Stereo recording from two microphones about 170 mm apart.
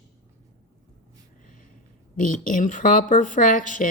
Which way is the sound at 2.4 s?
50° left (ahead or behind).